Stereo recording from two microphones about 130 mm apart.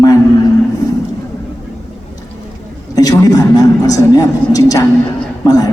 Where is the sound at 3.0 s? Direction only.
25° left (ahead or behind).